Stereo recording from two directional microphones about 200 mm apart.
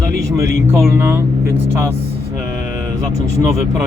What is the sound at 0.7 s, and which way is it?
Speech, 10° right (ahead or behind).